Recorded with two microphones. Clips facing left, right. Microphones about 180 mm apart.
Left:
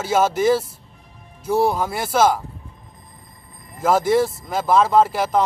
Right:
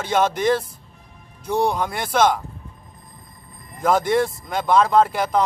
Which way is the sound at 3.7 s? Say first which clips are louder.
Left 2 dB; 5° left (ahead or behind).